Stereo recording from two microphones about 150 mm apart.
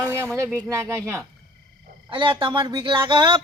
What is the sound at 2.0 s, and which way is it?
Speech, 30° right (ahead or behind).